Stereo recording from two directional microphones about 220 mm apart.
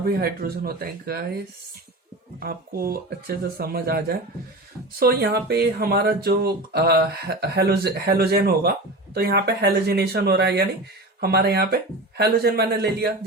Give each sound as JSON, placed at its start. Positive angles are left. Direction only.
{"t": 0.0, "sound": "speech", "side_deg": -45}
{"t": 2.4, "sound": "speech", "side_deg": -45}